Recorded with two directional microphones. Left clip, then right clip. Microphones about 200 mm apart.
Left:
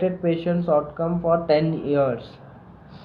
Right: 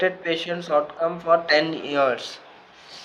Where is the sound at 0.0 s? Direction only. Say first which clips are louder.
Even; 30° right (ahead or behind).